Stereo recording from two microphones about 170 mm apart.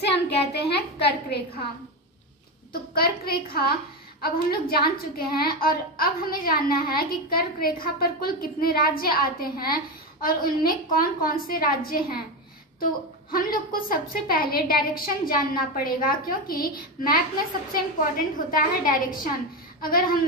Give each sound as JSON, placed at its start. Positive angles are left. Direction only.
{"t": 0.0, "sound": "a child's voice", "side_deg": 75}
{"t": 2.7, "sound": "a woman's voice", "side_deg": 65}
{"t": 13.3, "sound": "a woman's voice", "side_deg": 55}